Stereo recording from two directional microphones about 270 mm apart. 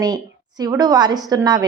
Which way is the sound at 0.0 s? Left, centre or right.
Centre.